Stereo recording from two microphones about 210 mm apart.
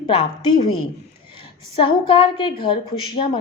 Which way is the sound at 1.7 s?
25° left (ahead or behind).